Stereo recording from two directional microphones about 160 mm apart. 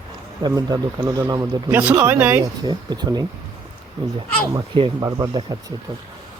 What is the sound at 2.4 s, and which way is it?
Speech, 25° right (ahead or behind).